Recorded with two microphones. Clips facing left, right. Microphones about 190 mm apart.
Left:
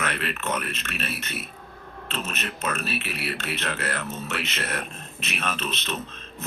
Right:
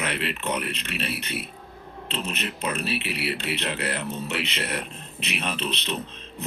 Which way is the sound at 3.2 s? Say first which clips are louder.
Right 2 dB; 25° right (ahead or behind).